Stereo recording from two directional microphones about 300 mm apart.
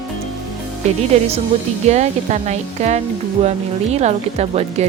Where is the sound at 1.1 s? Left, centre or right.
Right.